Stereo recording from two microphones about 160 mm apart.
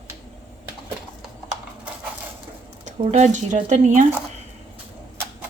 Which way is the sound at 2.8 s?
45° right (ahead or behind).